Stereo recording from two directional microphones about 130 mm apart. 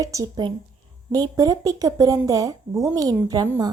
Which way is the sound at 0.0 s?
25° right (ahead or behind).